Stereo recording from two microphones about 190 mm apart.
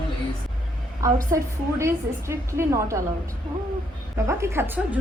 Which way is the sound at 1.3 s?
15° right (ahead or behind).